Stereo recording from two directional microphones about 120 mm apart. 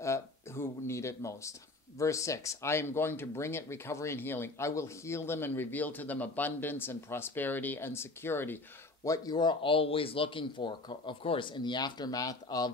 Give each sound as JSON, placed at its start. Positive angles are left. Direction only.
{"t": 0.0, "sound": "a sound", "side_deg": 25}
{"t": 2.0, "sound": "speech", "side_deg": 25}
{"t": 9.0, "sound": "speech", "side_deg": 30}